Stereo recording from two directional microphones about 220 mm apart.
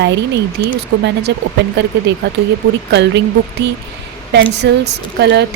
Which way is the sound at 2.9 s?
50° right (ahead or behind).